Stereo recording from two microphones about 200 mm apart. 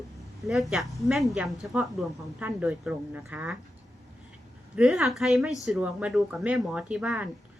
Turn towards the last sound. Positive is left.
turn(degrees=-5)  # may be behind; listen again after turning